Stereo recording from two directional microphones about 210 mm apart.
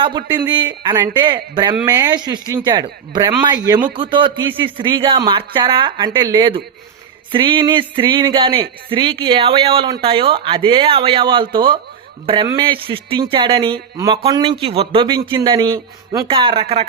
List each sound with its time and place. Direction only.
0.0 s speech: 20° right (ahead or behind)